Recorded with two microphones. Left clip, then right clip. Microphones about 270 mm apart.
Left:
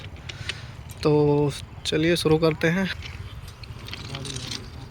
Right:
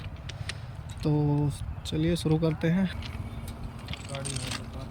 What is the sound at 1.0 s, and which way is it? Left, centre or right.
Speech, centre.